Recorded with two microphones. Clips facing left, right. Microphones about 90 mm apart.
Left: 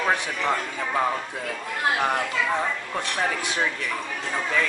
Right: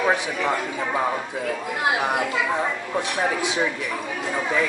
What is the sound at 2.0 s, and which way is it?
Speech, 10° right (ahead or behind).